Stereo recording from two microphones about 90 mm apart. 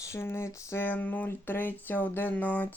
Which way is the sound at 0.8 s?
20° left (ahead or behind).